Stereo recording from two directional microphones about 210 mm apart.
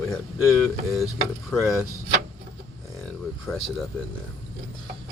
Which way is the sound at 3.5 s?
Centre (ahead or behind).